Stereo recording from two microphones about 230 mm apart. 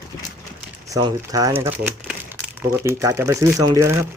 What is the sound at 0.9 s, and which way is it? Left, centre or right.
Speech, centre.